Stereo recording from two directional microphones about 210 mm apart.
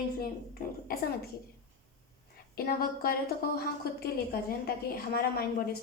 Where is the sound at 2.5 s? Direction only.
45° left (ahead or behind).